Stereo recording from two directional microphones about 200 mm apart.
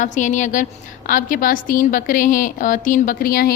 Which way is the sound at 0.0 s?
40° left (ahead or behind).